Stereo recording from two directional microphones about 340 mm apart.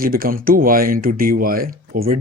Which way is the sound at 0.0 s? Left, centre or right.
Right.